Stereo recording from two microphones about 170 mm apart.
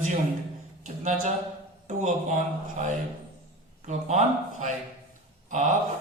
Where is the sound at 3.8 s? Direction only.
45° right (ahead or behind).